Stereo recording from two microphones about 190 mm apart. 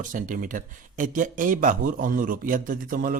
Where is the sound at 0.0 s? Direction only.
45° right (ahead or behind).